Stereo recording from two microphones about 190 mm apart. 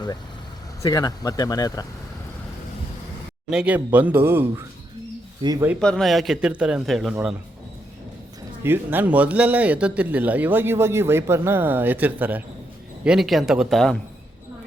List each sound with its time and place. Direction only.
0.8 s speech: 20° left (ahead or behind)
3.5 s a man's voice: 5° right (ahead or behind); by 5.6 s 20° right (ahead or behind)
5.8 s a man's voice: 5° left (ahead or behind)
8.6 s a man's voice: 10° right (ahead or behind)